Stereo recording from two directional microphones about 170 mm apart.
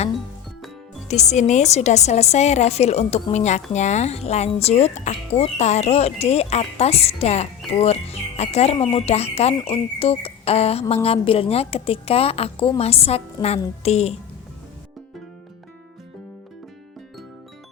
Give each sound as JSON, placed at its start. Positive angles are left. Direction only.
{"t": 1.0, "sound": "speech", "side_deg": 40}